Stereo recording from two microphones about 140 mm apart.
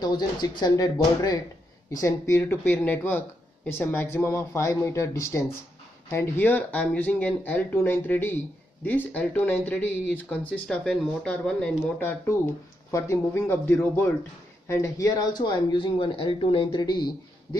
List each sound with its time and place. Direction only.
0.0 s speech: 30° left (ahead or behind)